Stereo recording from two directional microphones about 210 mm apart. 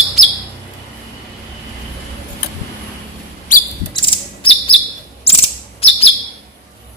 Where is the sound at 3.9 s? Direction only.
25° left (ahead or behind).